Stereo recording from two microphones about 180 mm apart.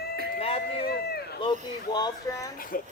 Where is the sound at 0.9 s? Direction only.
60° left (ahead or behind).